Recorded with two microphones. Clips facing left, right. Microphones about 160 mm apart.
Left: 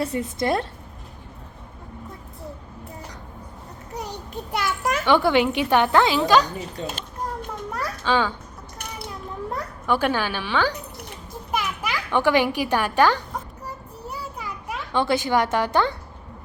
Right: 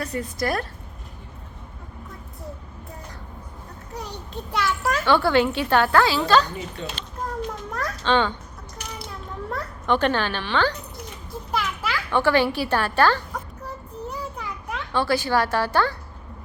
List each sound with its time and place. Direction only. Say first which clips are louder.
0.0 s a woman's voice: left 2 dB; 25° left (ahead or behind)
4.5 s a child's voice: right 1 dB; 15° left (ahead or behind)
6.7 s a child's voice: left 2 dB; 45° left (ahead or behind)
7.7 s children playing: even; 5° left (ahead or behind)
8.0 s a child's voice: right 1 dB; 5° left (ahead or behind)
9.5 s a child's voice: right 1 dB; 10° left (ahead or behind)
14.1 s children playing: left 1 dB; 10° left (ahead or behind)
15.0 s a woman's voice: left 1 dB; 20° left (ahead or behind)